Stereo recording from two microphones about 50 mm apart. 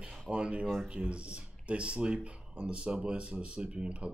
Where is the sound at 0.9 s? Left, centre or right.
Right.